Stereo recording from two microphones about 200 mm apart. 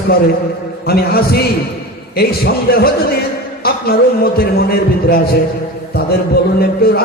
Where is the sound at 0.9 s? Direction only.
50° left (ahead or behind).